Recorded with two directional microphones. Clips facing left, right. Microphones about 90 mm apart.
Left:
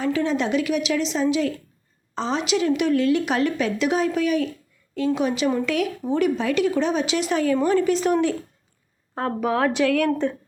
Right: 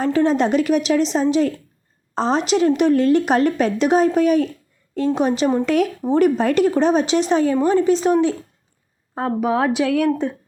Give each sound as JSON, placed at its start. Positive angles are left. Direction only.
{"t": 0.0, "sound": "speech", "side_deg": -40}